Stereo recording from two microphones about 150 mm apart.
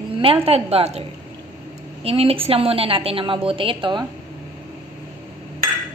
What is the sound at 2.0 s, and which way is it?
A woman's voice, 40° right (ahead or behind).